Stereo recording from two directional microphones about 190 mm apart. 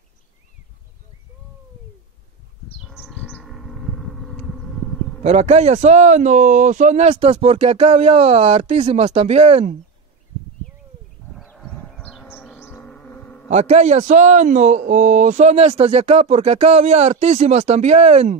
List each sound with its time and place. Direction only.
2.8 s sheep: 5° right (ahead or behind)
3.2 s bird: 5° left (ahead or behind)
5.2 s speech: 35° right (ahead or behind)
11.3 s bee: 5° left (ahead or behind)
12.5 s insect: 15° left (ahead or behind)
13.5 s speech: 35° right (ahead or behind)